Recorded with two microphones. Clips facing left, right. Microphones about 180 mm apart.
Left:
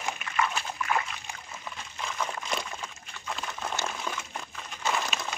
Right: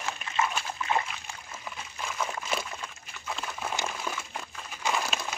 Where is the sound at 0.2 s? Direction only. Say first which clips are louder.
Right 1 dB; 25° right (ahead or behind).